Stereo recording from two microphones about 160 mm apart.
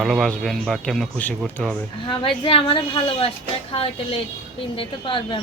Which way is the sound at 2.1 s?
30° left (ahead or behind).